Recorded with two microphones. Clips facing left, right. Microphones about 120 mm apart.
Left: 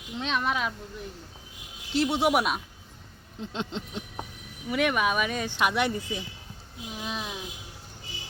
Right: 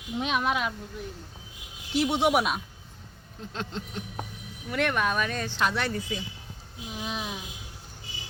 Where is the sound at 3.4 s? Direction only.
20° left (ahead or behind).